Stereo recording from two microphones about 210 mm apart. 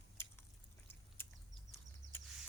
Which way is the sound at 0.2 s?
10° left (ahead or behind).